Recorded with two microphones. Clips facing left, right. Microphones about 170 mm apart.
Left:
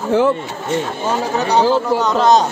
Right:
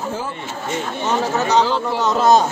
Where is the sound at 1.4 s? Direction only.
15° left (ahead or behind).